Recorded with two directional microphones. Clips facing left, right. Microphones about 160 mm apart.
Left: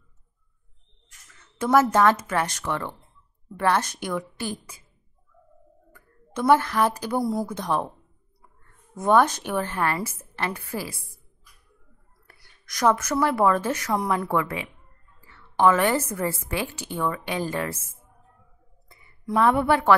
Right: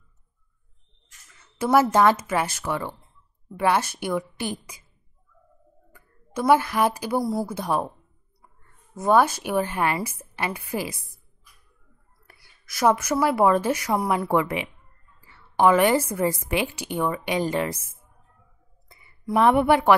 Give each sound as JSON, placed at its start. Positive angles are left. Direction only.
{"t": 1.4, "sound": "a woman's voice", "side_deg": -10}
{"t": 5.9, "sound": "a sound", "side_deg": -10}
{"t": 7.2, "sound": "a woman's voice", "side_deg": -5}
{"t": 8.9, "sound": "a woman's voice", "side_deg": -5}
{"t": 12.4, "sound": "a woman's voice", "side_deg": -10}
{"t": 18.9, "sound": "a woman's voice", "side_deg": -15}